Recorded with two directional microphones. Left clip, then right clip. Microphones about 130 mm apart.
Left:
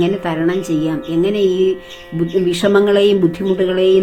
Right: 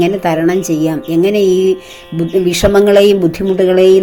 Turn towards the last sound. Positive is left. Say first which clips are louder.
# right 5 dB
turn(degrees=-40)  # may be behind; listen again after turning